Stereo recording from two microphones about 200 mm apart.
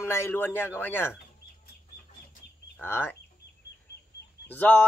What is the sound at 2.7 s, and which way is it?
Speech, 10° left (ahead or behind).